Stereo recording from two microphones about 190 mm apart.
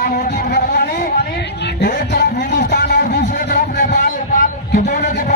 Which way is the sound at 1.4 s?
60° left (ahead or behind).